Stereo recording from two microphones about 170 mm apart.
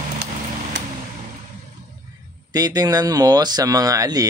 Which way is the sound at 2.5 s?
20° right (ahead or behind).